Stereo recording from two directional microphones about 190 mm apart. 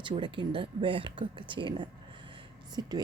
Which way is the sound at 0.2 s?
25° right (ahead or behind).